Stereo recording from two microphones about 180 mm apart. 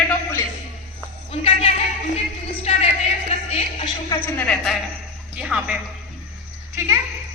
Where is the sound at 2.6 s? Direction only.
35° left (ahead or behind).